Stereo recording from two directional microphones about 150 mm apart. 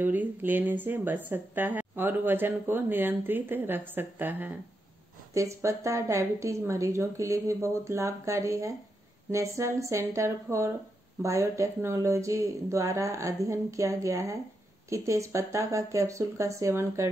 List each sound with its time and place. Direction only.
0.0 s a woman's voice: 10° right (ahead or behind)